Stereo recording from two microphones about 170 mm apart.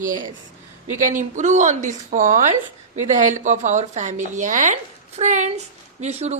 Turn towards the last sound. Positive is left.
turn(degrees=-40)  # may be behind; listen again after turning